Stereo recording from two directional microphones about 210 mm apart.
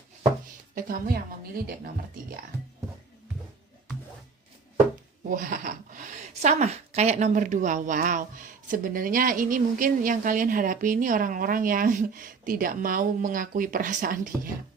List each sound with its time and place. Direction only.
0.4 s a woman's voice: 40° right (ahead or behind)
5.3 s a woman's voice: 40° right (ahead or behind)